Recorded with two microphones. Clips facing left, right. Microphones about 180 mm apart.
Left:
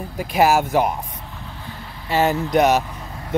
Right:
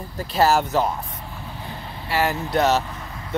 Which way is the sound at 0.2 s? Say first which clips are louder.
Left 2 dB; 15° left (ahead or behind).